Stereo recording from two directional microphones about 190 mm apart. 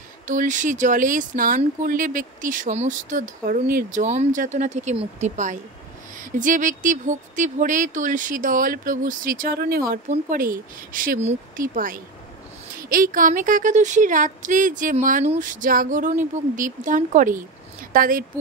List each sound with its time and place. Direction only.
0.3 s speech: 40° right (ahead or behind)